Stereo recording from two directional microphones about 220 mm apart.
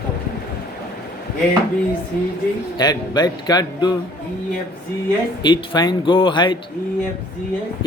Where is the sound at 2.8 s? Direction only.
20° left (ahead or behind).